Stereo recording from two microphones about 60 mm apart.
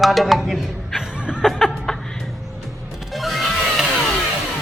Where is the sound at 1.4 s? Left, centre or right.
Centre.